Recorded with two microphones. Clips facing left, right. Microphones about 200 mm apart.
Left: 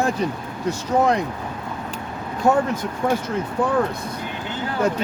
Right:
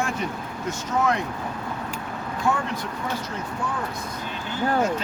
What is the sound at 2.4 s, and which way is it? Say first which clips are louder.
Speech: left 7 dB; 45° left (ahead or behind).